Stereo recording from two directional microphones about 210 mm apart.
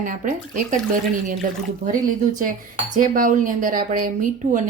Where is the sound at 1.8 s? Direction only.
40° right (ahead or behind).